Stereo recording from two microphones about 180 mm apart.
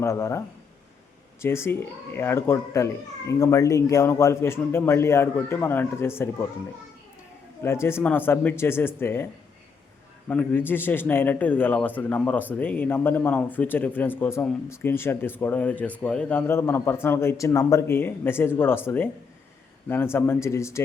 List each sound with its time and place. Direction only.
0.0 s a man's voice: 15° left (ahead or behind)
7.6 s a man's voice: 15° left (ahead or behind)
10.2 s a man's voice: 10° left (ahead or behind)
19.9 s a man's voice: 10° left (ahead or behind)